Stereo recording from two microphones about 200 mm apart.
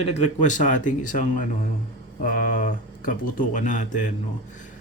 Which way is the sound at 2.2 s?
45° left (ahead or behind).